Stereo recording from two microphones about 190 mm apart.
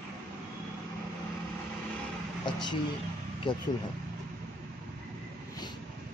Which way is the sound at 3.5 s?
25° left (ahead or behind).